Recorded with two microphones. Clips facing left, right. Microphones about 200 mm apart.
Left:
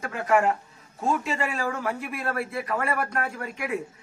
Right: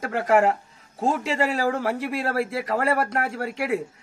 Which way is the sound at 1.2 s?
90° right.